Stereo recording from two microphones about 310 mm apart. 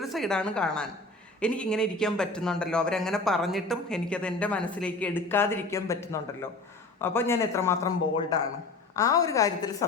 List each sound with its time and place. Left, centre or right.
0.0 s a man's voice: centre